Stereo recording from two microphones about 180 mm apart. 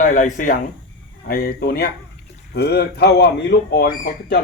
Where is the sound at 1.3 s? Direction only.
55° left (ahead or behind).